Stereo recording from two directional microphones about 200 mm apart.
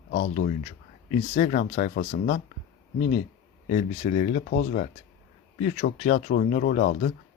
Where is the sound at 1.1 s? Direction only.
35° left (ahead or behind).